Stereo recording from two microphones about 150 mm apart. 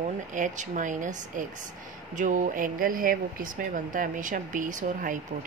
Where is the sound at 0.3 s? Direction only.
60° right (ahead or behind).